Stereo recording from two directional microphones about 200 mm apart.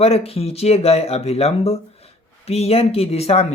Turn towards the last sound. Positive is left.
turn(degrees=30)  # may be behind; listen again after turning